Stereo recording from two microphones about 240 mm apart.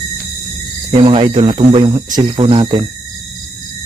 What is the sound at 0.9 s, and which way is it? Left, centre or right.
Speech, right.